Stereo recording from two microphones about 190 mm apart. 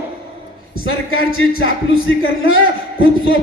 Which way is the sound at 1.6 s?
90° left.